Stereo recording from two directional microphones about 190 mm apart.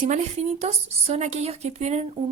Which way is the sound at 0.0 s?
35° right (ahead or behind).